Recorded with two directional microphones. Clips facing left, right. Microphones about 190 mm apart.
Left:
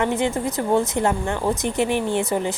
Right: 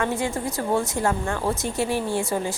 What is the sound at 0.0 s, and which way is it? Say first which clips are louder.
A woman's voice: left 4 dB; 20° left (ahead or behind).